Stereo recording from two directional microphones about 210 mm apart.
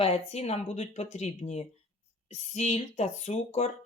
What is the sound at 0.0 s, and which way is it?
Speech, 30° left (ahead or behind).